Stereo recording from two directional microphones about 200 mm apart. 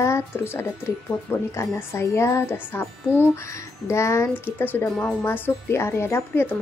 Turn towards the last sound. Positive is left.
turn(degrees=10)  # may be behind; listen again after turning